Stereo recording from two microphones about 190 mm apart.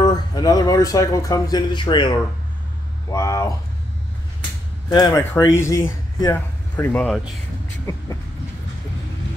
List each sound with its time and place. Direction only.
0.0 s speech: 20° left (ahead or behind)
4.8 s speech: 20° left (ahead or behind)